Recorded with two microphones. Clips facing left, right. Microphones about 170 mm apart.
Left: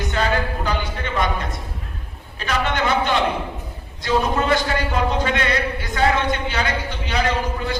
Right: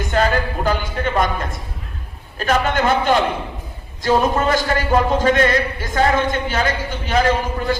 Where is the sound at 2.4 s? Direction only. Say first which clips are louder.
Right 4 dB; 45° right (ahead or behind).